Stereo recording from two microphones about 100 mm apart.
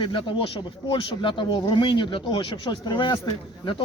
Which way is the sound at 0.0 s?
55° left (ahead or behind).